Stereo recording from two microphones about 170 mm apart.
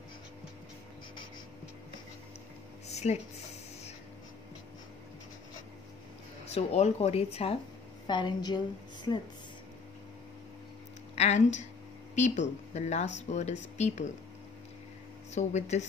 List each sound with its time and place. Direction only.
2.9 s a sound: 40° left (ahead or behind)
6.5 s speech: 40° left (ahead or behind)
8.1 s a woman's voice: 25° left (ahead or behind)
11.1 s speech: 40° left (ahead or behind)
15.3 s speech: 45° left (ahead or behind)